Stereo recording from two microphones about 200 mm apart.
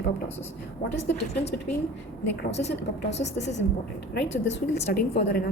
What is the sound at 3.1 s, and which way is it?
Speech, 35° left (ahead or behind).